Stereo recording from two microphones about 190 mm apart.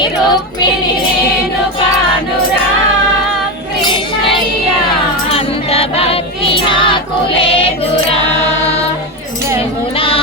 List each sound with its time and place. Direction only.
0.3 s music: 20° left (ahead or behind)
5.3 s choir: 30° left (ahead or behind)